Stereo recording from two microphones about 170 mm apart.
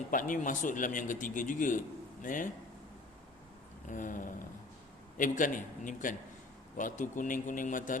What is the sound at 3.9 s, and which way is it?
A man's voice, 50° left (ahead or behind).